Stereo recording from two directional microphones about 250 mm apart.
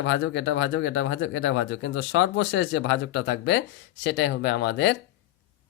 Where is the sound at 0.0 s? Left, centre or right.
Left.